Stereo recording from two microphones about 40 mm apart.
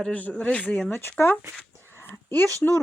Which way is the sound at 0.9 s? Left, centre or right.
Left.